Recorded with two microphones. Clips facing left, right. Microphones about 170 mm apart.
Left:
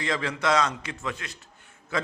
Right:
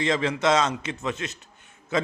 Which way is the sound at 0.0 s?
20° right (ahead or behind).